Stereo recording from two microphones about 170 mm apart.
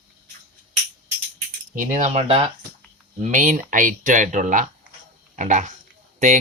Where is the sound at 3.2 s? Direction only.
45° right (ahead or behind).